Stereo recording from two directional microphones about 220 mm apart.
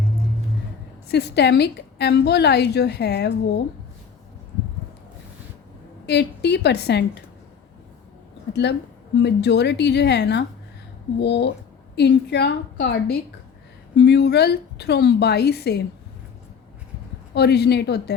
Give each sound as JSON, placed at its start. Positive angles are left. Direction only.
{"t": 1.0, "sound": "a woman's voice", "side_deg": 50}
{"t": 6.1, "sound": "a woman's voice", "side_deg": 50}
{"t": 9.2, "sound": "a woman's voice", "side_deg": 50}
{"t": 17.3, "sound": "a woman's voice", "side_deg": 50}